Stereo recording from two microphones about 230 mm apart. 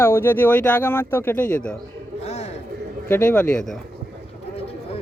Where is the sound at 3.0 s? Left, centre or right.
Centre.